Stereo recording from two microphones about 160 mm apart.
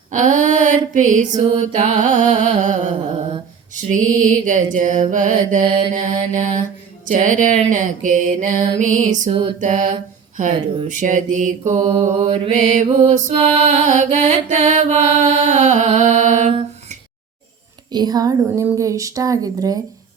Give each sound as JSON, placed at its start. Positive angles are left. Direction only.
{"t": 0.1, "sound": "female singing", "side_deg": -50}
{"t": 1.4, "sound": "music", "side_deg": -50}
{"t": 5.6, "sound": "music", "side_deg": -30}
{"t": 5.9, "sound": "music", "side_deg": -50}
{"t": 9.6, "sound": "a sound", "side_deg": -50}
{"t": 10.8, "sound": "music", "side_deg": -55}
{"t": 11.8, "sound": "music", "side_deg": -40}
{"t": 12.3, "sound": "music", "side_deg": -50}
{"t": 13.3, "sound": "music", "side_deg": -35}
{"t": 13.8, "sound": "music", "side_deg": -50}
{"t": 17.9, "sound": "speech", "side_deg": -25}
{"t": 18.4, "sound": "speech", "side_deg": -15}